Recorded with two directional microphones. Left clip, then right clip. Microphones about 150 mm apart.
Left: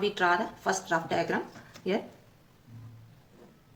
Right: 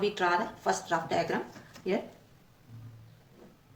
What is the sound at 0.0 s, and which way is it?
Speech, 25° left (ahead or behind).